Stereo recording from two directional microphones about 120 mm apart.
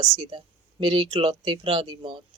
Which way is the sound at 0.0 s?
40° right (ahead or behind).